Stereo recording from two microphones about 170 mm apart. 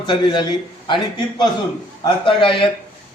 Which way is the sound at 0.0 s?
25° left (ahead or behind).